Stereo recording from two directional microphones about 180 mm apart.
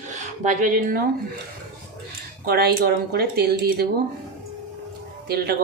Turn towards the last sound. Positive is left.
turn(degrees=-60)  # may be behind; listen again after turning